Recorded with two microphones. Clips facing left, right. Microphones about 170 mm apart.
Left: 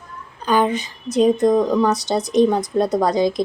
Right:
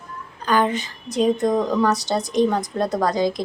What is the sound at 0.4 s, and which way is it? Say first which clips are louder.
A woman's voice: left 2 dB; 20° left (ahead or behind).